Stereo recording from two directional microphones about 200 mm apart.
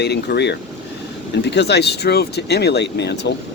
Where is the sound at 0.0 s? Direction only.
55° left (ahead or behind).